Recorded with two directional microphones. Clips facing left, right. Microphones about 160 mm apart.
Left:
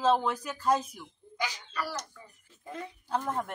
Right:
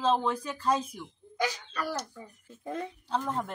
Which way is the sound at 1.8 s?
50° right (ahead or behind).